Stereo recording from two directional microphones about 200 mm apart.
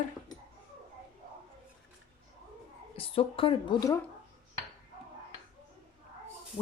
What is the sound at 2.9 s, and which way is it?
Speech, 30° left (ahead or behind).